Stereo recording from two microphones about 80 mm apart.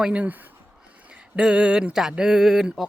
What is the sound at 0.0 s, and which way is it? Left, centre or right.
Speech, centre.